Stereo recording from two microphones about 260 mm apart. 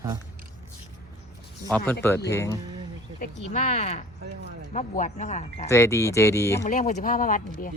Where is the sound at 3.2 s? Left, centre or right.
Left.